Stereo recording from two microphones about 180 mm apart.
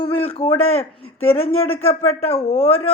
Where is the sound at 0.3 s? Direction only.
30° left (ahead or behind).